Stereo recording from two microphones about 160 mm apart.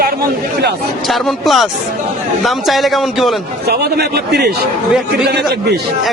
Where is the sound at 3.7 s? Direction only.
90° right.